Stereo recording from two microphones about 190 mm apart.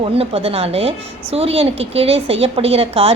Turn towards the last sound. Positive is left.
turn(degrees=-30)  # may be behind; listen again after turning